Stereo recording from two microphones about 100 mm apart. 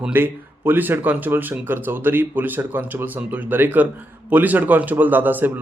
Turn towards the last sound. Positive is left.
turn(degrees=-20)  # may be behind; listen again after turning